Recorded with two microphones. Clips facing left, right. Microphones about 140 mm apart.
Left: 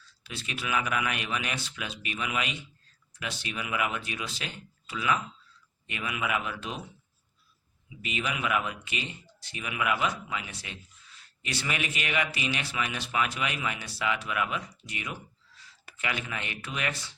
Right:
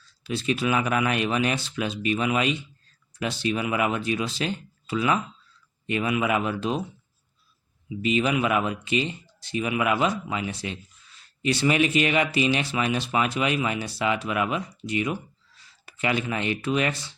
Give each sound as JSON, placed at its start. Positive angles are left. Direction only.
{"t": 0.3, "sound": "speech", "side_deg": -30}
{"t": 8.0, "sound": "speech", "side_deg": -30}